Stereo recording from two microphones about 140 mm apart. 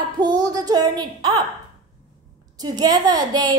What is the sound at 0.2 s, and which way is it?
A child's voice, 30° right (ahead or behind).